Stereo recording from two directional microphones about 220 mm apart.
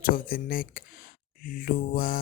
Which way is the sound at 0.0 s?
40° left (ahead or behind).